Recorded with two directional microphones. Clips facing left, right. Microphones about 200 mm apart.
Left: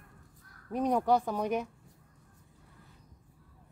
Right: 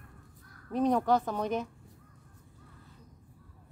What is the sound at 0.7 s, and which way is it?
Speech, 10° left (ahead or behind).